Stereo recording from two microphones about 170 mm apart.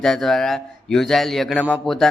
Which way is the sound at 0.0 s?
Centre (ahead or behind).